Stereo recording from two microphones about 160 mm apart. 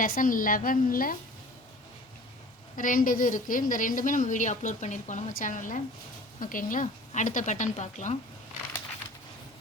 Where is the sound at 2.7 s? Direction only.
55° left (ahead or behind).